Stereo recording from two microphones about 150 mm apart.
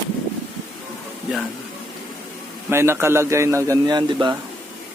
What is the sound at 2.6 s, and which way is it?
A man's voice, 15° right (ahead or behind).